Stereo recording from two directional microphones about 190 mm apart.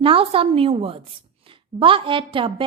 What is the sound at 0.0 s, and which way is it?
A woman's voice, 30° right (ahead or behind).